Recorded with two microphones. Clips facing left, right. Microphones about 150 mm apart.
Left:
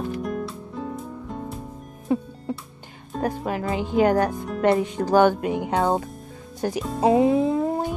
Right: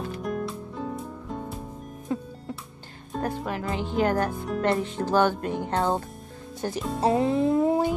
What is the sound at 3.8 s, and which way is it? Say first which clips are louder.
Speech: left 5 dB; 10° left (ahead or behind).